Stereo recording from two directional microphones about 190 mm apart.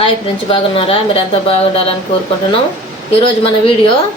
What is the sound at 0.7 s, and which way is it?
Speech, 30° left (ahead or behind).